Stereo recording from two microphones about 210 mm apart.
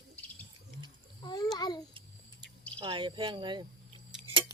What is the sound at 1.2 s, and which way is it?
Speech, 20° left (ahead or behind).